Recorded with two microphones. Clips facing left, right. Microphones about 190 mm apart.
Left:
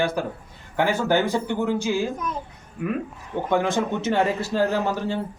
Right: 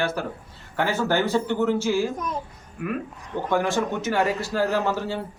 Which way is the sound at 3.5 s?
20° left (ahead or behind).